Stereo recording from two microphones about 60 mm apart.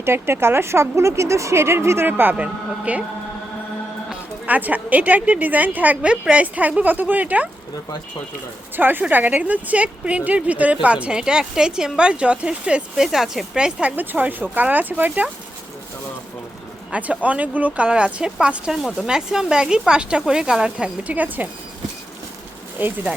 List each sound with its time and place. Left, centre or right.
0.0 s speech: right
2.0 s speech: right
2.3 s a woman's voice: right
4.4 s a woman's voice: right
8.7 s a woman's voice: right; by 13.9 s centre
13.9 s speech: right
16.9 s a woman's voice: right